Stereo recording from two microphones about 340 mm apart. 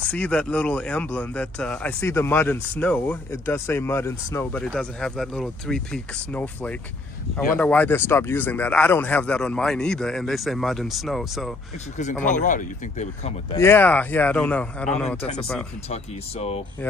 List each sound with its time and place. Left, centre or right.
0.0 s speech: centre
12.0 s speech: left
13.6 s speech: centre
15.9 s speech: centre